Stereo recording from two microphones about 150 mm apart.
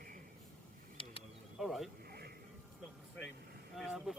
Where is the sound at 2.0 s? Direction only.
90° right.